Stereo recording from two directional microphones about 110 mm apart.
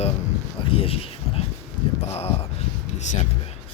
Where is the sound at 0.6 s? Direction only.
55° left (ahead or behind).